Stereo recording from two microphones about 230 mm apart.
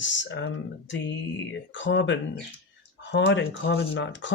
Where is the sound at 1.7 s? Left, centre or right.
Left.